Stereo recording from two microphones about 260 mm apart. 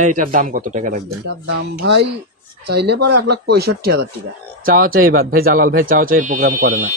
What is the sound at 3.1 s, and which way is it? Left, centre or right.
Speech, right.